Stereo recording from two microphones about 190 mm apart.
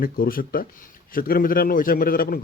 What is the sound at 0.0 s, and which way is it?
A man's voice, 50° left (ahead or behind).